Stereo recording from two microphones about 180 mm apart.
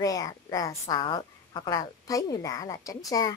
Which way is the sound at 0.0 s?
20° left (ahead or behind).